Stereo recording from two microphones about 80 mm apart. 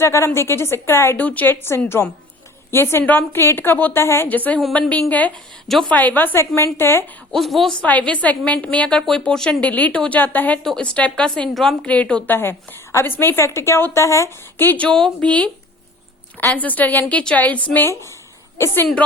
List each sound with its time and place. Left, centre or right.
0.0 s a woman's voice: left
1.2 s a woman's voice: centre
4.3 s a woman's voice: left
7.3 s a woman's voice: centre
7.8 s a woman's voice: centre
10.6 s a woman's voice: centre
11.9 s a woman's voice: centre
12.4 s a woman's voice: left
14.6 s a woman's voice: centre
16.6 s a woman's voice: left
18.5 s a woman's voice: left